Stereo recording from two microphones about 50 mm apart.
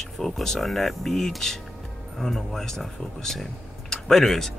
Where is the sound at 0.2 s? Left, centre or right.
Centre.